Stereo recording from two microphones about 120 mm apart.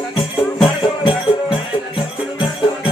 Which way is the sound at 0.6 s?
45° left (ahead or behind).